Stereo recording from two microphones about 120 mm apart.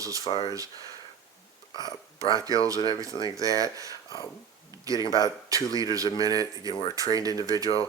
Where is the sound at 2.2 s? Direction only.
30° right (ahead or behind).